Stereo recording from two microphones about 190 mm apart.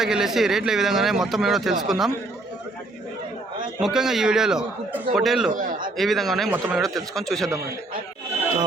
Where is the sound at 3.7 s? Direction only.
5° right (ahead or behind).